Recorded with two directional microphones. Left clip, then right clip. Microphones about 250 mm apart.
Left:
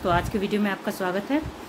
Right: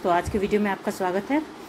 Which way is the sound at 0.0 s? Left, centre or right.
Centre.